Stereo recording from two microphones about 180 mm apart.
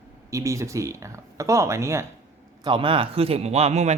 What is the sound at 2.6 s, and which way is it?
Speech, 30° right (ahead or behind).